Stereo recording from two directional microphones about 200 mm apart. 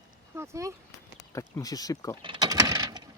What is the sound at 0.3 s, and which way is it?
Speech, 15° right (ahead or behind).